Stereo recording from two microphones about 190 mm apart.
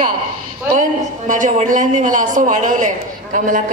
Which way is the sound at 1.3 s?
40° right (ahead or behind).